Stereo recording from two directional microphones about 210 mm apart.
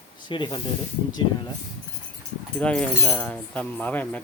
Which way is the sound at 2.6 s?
5° left (ahead or behind).